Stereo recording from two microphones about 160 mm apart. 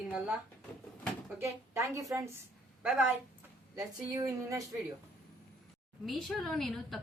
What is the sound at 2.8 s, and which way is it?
Speech, 10° right (ahead or behind).